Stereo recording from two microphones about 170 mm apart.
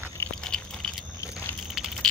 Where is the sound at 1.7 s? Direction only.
Centre (ahead or behind).